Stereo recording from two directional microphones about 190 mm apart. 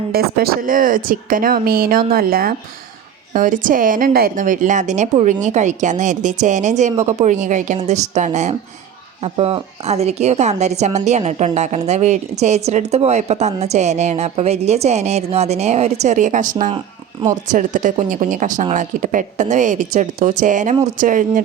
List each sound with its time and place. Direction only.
0.1 s a woman's voice: 55° right (ahead or behind)
16.7 s speech: 20° right (ahead or behind)
17.5 s a woman's voice: 40° right (ahead or behind)